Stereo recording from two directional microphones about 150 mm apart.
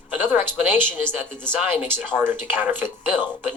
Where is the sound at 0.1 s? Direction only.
10° right (ahead or behind).